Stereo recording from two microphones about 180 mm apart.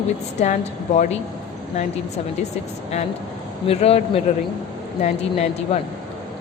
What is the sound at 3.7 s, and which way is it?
Speech, 35° left (ahead or behind).